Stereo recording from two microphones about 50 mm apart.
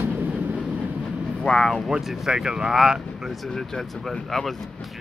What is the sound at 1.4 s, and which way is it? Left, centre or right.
Vehicle, centre.